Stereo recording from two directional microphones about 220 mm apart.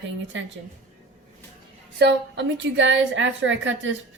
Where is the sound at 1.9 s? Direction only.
50° right (ahead or behind).